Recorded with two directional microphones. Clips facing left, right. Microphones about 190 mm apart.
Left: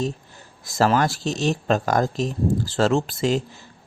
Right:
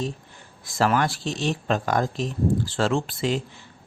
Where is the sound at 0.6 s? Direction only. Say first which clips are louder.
Left 3 dB; 40° left (ahead or behind).